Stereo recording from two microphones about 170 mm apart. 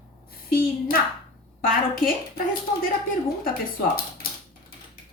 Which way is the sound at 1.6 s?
55° left (ahead or behind).